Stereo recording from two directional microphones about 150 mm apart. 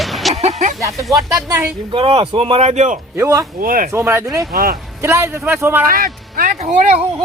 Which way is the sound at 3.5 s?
70° right (ahead or behind).